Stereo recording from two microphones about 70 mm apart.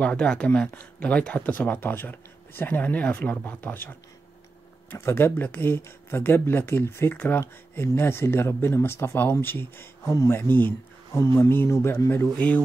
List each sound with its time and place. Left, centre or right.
0.0 s speech: centre
4.9 s speech: left
10.0 s speech: left
10.3 s speech: left
11.1 s speech: left
12.4 s speech: left